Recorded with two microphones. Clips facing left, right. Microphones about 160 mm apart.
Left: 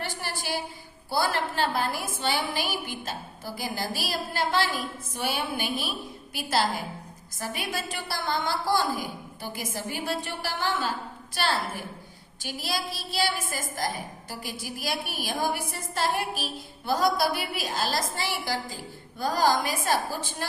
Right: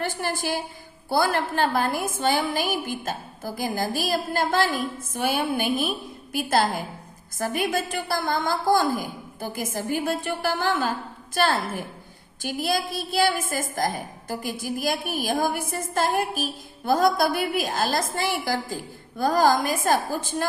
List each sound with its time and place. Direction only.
0.0 s a woman's voice: 50° right (ahead or behind)